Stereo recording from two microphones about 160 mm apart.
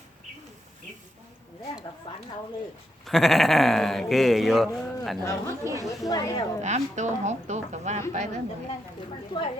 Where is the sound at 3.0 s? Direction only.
Centre (ahead or behind).